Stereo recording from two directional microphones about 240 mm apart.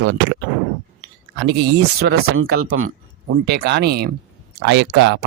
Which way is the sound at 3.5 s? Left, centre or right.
Right.